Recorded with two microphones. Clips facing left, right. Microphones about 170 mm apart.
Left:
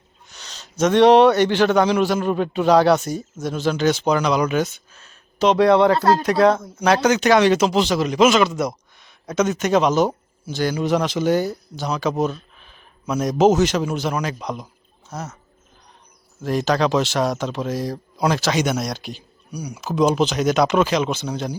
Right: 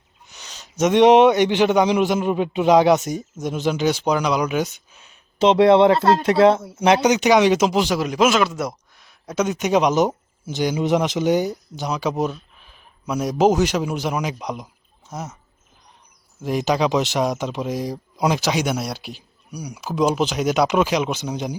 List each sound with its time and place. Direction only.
0.3 s speech: 10° right (ahead or behind)
6.6 s speech: 10° right (ahead or behind)
16.4 s speech: 10° right (ahead or behind)